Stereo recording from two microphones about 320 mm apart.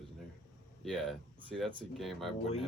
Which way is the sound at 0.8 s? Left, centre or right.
Centre.